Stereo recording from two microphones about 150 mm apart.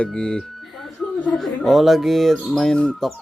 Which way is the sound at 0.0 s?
5° left (ahead or behind).